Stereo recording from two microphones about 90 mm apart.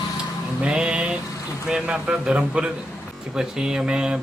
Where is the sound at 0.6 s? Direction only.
10° right (ahead or behind).